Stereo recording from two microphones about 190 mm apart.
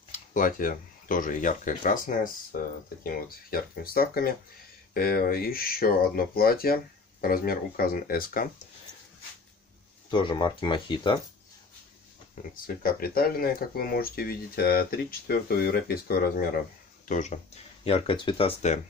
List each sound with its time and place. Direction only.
0.1 s speech: 45° left (ahead or behind)
10.1 s speech: 25° left (ahead or behind)
12.6 s speech: 50° left (ahead or behind)
17.1 s speech: 40° left (ahead or behind)